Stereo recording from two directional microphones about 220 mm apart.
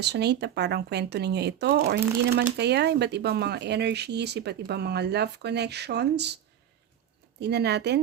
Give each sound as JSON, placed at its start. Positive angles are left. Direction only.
{"t": 0.0, "sound": "speech", "side_deg": -50}
{"t": 7.4, "sound": "speech", "side_deg": -50}